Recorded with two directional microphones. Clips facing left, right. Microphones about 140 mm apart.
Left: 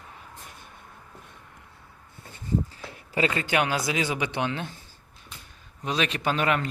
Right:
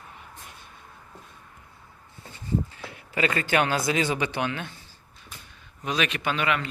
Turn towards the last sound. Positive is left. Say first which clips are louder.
# left 2 dB
turn(degrees=40)  # may be behind; listen again after turning